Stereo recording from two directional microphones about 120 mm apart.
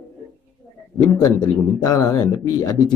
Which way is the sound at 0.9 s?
30° left (ahead or behind).